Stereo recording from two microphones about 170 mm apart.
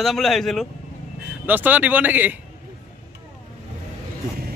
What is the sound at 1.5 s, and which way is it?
Speech, 10° right (ahead or behind).